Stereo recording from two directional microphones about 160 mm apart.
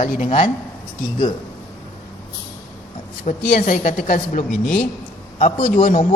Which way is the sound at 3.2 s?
50° left (ahead or behind).